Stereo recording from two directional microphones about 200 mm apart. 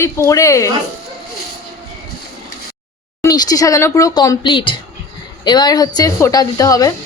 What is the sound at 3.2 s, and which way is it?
A woman's voice, 15° left (ahead or behind).